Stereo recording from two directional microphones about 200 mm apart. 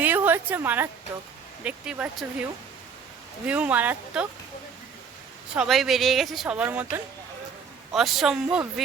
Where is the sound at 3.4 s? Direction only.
5° right (ahead or behind).